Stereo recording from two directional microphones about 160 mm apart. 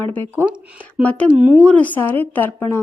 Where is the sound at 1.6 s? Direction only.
10° left (ahead or behind).